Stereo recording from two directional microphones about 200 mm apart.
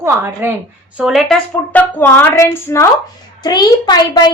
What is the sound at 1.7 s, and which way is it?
A woman's voice, 10° left (ahead or behind).